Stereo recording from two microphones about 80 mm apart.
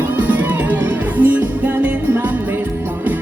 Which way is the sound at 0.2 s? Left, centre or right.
Right.